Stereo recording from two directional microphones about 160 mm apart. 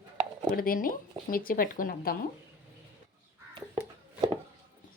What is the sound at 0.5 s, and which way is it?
Speech, 65° left (ahead or behind).